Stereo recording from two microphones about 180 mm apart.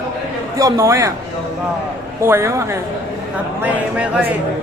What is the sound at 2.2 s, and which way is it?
Speech, 15° right (ahead or behind).